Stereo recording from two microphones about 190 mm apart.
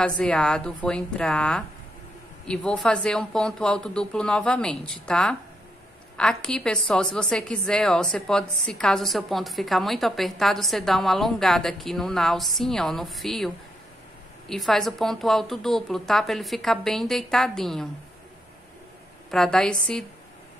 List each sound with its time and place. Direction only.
0.0 s a woman's voice: 5° left (ahead or behind)
14.5 s a woman's voice: centre (ahead or behind)
19.3 s a woman's voice: centre (ahead or behind)